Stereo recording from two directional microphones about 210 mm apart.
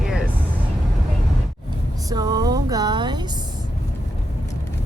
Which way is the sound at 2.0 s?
20° right (ahead or behind).